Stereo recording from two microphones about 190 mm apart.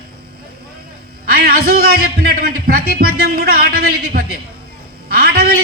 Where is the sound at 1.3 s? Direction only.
55° right (ahead or behind).